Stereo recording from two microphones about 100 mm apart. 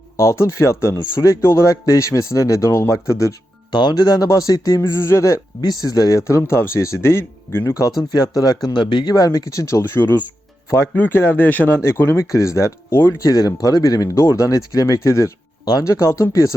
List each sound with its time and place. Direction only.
0.2 s speech: 30° left (ahead or behind)
3.7 s speech: 50° left (ahead or behind)
4.8 s speech: 25° left (ahead or behind); by 9.1 s 55° left (ahead or behind)
9.1 s speech: 35° left (ahead or behind)